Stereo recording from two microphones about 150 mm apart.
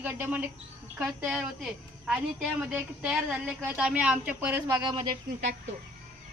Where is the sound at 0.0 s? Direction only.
10° right (ahead or behind).